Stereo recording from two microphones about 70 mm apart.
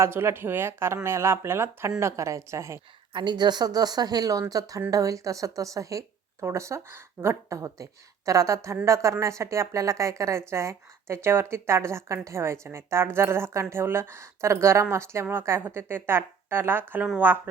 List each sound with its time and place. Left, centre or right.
0.0 s a woman's voice: right
3.2 s a woman's voice: right